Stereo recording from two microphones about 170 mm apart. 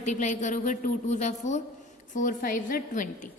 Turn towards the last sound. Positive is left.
turn(degrees=50)  # may be behind; listen again after turning